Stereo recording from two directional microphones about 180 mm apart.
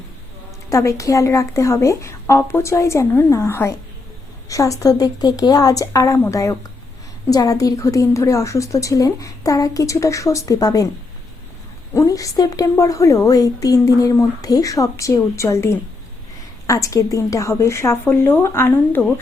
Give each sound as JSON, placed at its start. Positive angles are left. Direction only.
{"t": 0.7, "sound": "a woman's voice", "side_deg": 15}
{"t": 11.9, "sound": "a woman's voice", "side_deg": 20}